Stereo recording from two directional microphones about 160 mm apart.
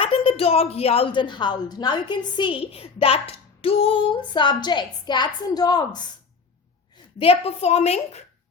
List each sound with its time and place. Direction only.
0.0 s a woman's voice: 35° left (ahead or behind)
7.2 s a woman's voice: 40° left (ahead or behind)